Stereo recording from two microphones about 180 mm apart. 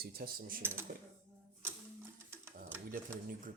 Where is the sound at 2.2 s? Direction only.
15° right (ahead or behind).